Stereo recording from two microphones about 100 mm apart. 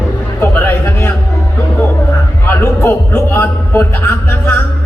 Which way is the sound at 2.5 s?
20° left (ahead or behind).